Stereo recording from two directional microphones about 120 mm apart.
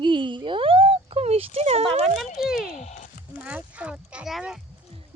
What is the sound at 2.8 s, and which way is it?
Speech, 70° left (ahead or behind).